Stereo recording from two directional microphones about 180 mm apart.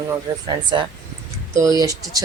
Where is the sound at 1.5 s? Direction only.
20° right (ahead or behind).